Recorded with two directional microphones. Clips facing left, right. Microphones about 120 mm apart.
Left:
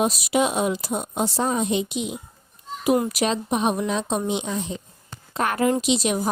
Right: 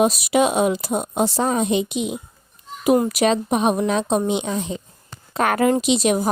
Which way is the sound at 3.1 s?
60° right (ahead or behind).